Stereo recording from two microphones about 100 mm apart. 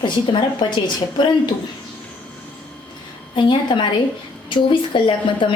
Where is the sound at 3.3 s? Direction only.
50° left (ahead or behind).